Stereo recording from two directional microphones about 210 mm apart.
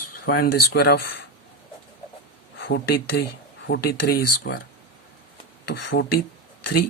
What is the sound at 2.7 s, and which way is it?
Speech, 50° left (ahead or behind).